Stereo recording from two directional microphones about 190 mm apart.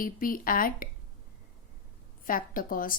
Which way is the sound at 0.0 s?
45° left (ahead or behind).